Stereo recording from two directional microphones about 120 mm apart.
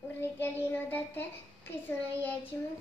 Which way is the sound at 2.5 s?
20° left (ahead or behind).